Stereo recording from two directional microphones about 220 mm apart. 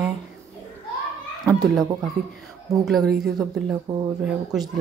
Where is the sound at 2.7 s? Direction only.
Centre (ahead or behind).